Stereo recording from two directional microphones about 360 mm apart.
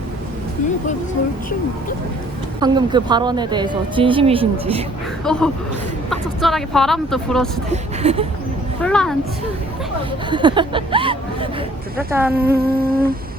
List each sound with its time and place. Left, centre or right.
2.6 s speech: centre
5.2 s speech: centre
8.0 s speech: centre
8.8 s speech: centre
10.2 s speech: centre
12.5 s humming: right